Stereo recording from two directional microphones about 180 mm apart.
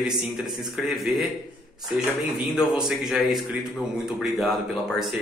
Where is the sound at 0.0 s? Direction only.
Centre (ahead or behind).